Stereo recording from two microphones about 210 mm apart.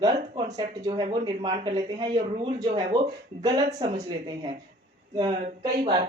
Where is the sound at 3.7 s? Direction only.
30° right (ahead or behind).